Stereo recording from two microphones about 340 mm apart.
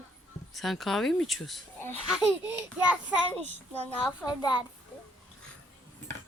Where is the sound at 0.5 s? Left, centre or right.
Centre.